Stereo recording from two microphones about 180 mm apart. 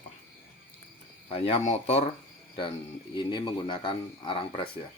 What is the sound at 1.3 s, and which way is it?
Speech, 35° left (ahead or behind).